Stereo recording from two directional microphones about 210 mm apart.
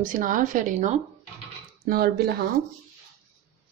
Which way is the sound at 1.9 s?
50° right (ahead or behind).